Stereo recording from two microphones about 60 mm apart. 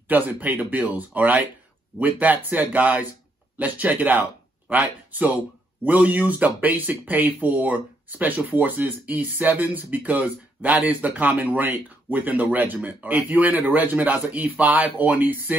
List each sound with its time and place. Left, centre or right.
0.1 s speech: right